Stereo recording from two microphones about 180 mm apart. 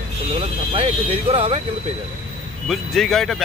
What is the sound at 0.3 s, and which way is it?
Speech, 30° right (ahead or behind).